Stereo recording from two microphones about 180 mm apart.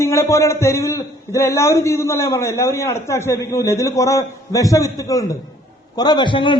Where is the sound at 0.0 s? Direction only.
15° left (ahead or behind).